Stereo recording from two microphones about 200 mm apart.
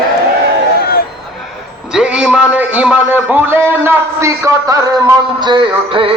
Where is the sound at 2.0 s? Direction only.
5° right (ahead or behind).